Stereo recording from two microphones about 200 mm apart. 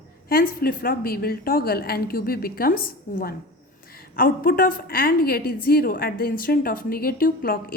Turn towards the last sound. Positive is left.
turn(degrees=45)  # may be behind; listen again after turning